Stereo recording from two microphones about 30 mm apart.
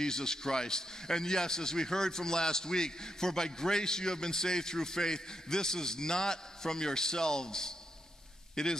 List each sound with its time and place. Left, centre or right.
0.0 s a man's voice: left